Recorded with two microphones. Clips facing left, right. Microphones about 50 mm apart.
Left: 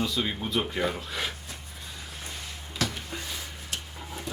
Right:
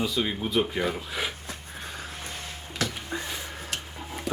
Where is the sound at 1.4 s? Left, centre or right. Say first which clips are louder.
Right 4 dB; right.